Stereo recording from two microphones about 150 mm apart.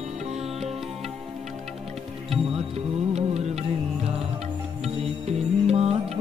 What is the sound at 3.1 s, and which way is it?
Music, 45° right (ahead or behind).